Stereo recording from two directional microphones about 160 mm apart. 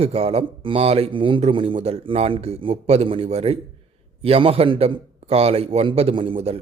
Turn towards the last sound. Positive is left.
turn(degrees=-40)  # may be behind; listen again after turning